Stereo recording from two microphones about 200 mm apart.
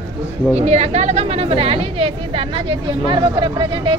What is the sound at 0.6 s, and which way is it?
A woman's voice, 35° right (ahead or behind).